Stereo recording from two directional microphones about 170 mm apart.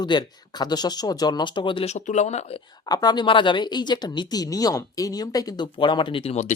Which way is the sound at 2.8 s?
25° left (ahead or behind).